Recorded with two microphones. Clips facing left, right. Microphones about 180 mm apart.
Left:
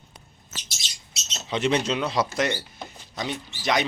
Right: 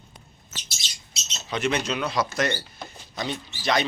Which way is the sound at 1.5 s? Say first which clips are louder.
Left 2 dB; 25° left (ahead or behind).